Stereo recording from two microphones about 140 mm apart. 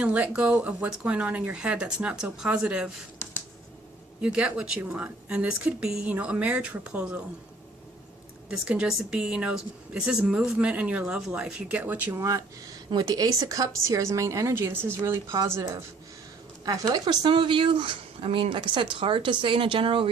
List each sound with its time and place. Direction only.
0.0 s a woman's voice: 10° right (ahead or behind)
4.2 s a woman's voice: 5° right (ahead or behind)
8.4 s a woman's voice: 10° right (ahead or behind)
16.6 s speech: 30° right (ahead or behind)